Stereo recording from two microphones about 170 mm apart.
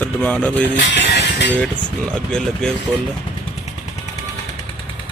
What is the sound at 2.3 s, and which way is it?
Speech, 5° left (ahead or behind).